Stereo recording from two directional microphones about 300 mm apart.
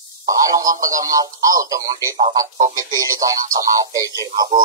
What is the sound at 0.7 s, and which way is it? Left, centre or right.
Speech, centre.